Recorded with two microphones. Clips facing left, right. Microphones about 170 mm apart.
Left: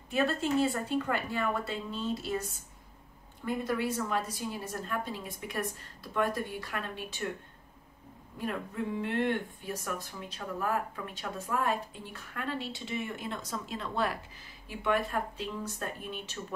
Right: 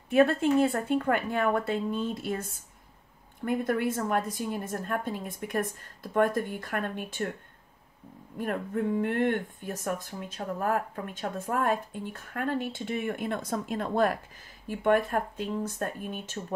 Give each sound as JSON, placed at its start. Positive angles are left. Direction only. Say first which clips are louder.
{"t": 0.1, "sound": "speech", "louder": "right 7 dB", "side_deg": -55}
{"t": 3.4, "sound": "speech", "louder": "right 4 dB", "side_deg": -55}
{"t": 8.4, "sound": "speech", "louder": "right 5 dB", "side_deg": -50}